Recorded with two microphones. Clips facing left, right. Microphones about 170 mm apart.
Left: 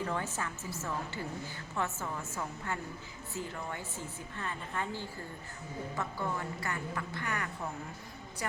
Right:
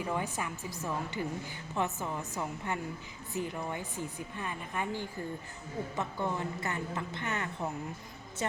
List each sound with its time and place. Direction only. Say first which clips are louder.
0.0 s a woman's voice: right 1 dB; 15° right (ahead or behind)